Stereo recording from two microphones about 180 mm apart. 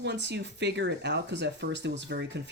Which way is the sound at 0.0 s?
75° right (ahead or behind).